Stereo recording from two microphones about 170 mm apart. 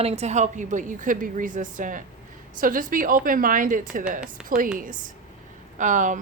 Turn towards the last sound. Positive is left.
turn(degrees=-50)  # may be behind; listen again after turning